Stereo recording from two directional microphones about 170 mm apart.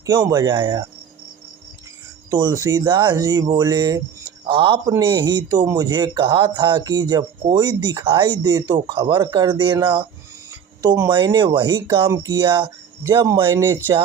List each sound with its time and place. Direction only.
0.0 s a man's voice: 20° right (ahead or behind)
2.3 s a man's voice: 20° right (ahead or behind)
10.8 s speech: 15° right (ahead or behind)
11.1 s a man's voice: 25° right (ahead or behind)
13.0 s speech: 20° right (ahead or behind)